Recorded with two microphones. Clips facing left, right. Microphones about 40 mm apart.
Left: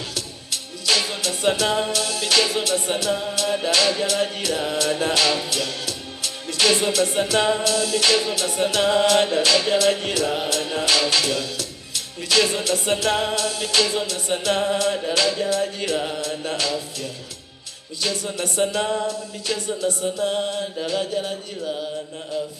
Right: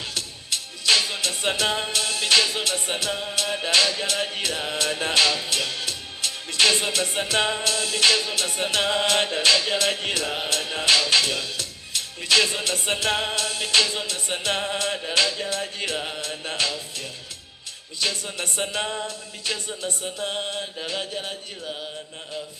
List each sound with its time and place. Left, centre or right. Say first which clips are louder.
0.1 s music: even; right
5.2 s music: left 1 dB; left
5.5 s music: left 1 dB; right
18.0 s music: left 2 dB; right